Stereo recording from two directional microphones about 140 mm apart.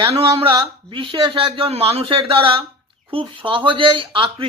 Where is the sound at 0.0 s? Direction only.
45° right (ahead or behind).